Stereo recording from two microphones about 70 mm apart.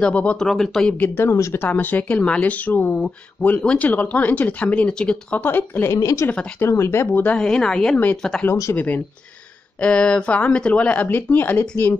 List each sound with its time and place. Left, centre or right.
0.0 s speech: centre
0.5 s speech: centre
0.9 s speech: left
1.3 s speech: left
1.7 s speech: left
5.4 s speech: left
5.9 s speech: left
6.7 s speech: left
7.2 s speech: centre
8.7 s speech: left